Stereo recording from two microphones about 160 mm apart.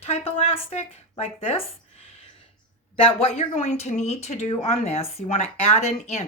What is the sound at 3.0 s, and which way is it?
Speech, 40° left (ahead or behind).